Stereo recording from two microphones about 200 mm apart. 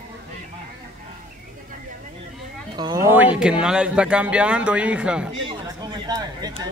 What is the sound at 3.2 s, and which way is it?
Speech, 5° right (ahead or behind).